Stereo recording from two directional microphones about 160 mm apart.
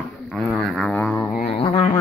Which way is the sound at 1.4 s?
40° left (ahead or behind).